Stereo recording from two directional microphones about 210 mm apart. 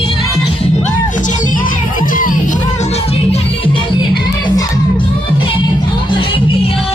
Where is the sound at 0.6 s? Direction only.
35° left (ahead or behind); by 4.8 s 20° left (ahead or behind).